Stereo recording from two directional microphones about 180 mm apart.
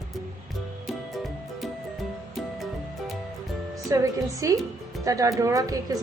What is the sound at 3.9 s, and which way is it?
A woman's voice, 15° right (ahead or behind).